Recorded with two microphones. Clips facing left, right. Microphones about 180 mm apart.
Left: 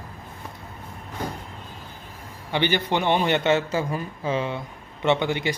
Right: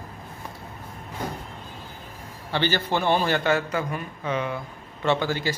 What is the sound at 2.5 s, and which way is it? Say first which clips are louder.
A man's voice: left 1 dB; 15° left (ahead or behind).